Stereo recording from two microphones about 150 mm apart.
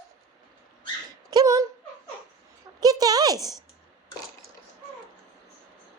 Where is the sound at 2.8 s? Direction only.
25° right (ahead or behind).